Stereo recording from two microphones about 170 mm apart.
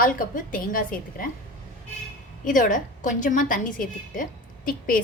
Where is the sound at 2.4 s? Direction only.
50° left (ahead or behind).